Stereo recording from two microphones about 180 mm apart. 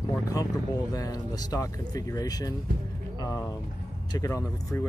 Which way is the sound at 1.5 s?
20° left (ahead or behind).